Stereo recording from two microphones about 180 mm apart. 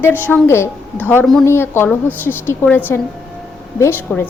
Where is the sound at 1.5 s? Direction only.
15° left (ahead or behind).